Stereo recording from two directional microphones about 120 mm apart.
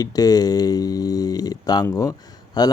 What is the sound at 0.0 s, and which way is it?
Speech, 30° left (ahead or behind).